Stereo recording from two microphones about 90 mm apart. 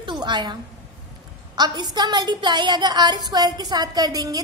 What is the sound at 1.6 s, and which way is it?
A woman's voice, 50° right (ahead or behind).